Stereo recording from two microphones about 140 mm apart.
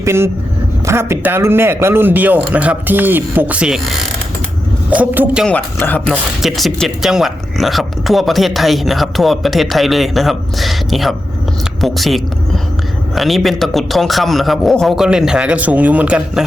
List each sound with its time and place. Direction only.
0.0 s a man's voice: 20° right (ahead or behind)
5.5 s speech: 10° left (ahead or behind)
6.4 s speech: centre (ahead or behind)